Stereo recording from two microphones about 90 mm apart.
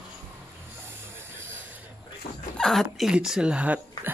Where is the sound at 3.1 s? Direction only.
10° right (ahead or behind).